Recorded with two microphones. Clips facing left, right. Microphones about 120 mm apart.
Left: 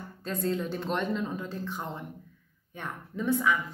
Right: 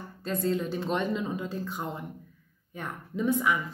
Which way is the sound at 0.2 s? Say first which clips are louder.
Right 2 dB; 5° right (ahead or behind).